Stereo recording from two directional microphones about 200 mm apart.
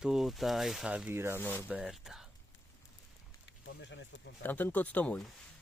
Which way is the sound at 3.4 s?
65° left (ahead or behind).